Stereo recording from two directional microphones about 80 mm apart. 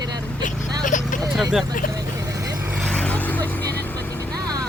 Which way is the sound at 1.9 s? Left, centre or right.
Right.